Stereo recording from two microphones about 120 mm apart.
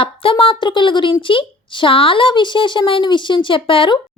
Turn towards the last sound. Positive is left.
turn(degrees=45)  # may be behind; listen again after turning